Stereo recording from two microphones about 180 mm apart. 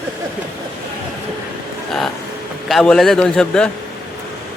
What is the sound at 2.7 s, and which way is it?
A man's voice, centre (ahead or behind).